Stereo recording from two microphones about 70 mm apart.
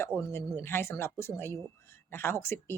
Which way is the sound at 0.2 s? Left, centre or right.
Left.